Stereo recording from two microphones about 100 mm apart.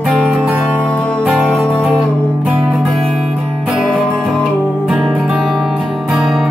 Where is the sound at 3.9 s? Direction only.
Centre (ahead or behind).